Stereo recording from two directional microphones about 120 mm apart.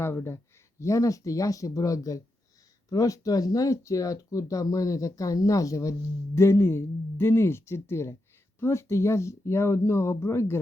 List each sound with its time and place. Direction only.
0.0 s speech: 20° left (ahead or behind)